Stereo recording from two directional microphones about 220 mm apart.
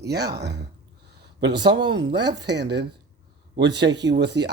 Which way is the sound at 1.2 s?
50° right (ahead or behind).